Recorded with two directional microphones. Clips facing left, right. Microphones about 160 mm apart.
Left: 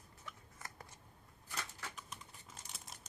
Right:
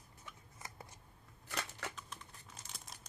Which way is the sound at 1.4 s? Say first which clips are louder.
Right 4 dB; 75° right (ahead or behind).